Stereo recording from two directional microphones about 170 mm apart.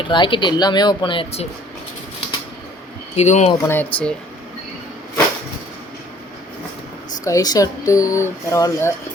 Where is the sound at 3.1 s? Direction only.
40° left (ahead or behind).